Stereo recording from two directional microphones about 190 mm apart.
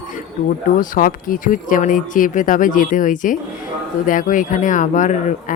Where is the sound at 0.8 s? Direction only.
45° left (ahead or behind).